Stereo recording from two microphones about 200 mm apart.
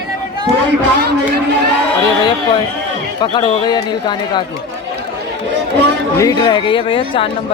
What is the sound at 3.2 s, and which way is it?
Speech, 20° left (ahead or behind).